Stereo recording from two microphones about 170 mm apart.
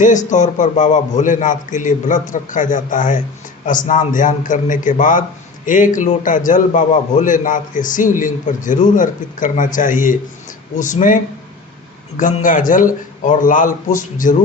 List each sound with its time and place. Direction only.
0.0 s a man's voice: 45° left (ahead or behind)